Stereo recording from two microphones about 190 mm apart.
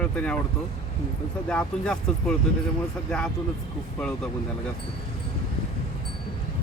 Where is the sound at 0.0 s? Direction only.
5° left (ahead or behind).